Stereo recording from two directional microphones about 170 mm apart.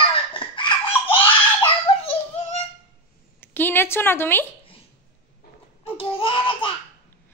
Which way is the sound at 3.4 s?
10° left (ahead or behind).